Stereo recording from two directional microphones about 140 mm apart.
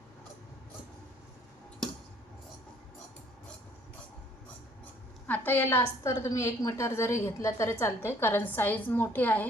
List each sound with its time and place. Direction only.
5.2 s a woman's voice: 15° left (ahead or behind)